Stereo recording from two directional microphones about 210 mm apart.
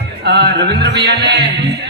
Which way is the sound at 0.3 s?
55° right (ahead or behind).